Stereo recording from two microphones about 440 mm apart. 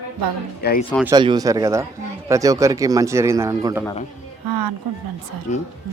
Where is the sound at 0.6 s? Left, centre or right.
Left.